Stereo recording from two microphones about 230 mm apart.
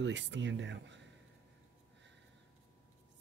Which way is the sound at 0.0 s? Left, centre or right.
Right.